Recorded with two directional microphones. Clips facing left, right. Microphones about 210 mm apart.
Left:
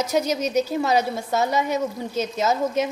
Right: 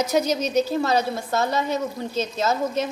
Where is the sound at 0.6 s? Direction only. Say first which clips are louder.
Even; 15° left (ahead or behind).